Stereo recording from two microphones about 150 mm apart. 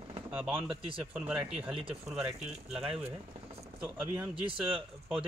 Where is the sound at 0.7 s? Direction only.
35° right (ahead or behind).